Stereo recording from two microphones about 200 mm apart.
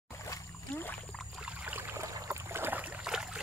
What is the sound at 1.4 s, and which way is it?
Boat, 10° right (ahead or behind).